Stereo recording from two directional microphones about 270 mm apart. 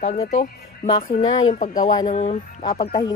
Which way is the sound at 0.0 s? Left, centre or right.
Left.